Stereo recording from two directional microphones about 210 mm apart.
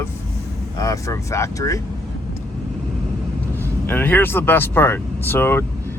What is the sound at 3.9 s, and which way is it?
Speech, 10° left (ahead or behind).